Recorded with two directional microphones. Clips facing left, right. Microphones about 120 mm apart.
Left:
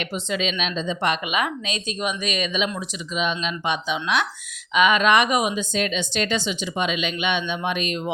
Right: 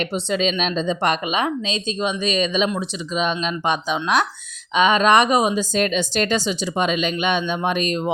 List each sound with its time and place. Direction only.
0.0 s speech: 35° right (ahead or behind)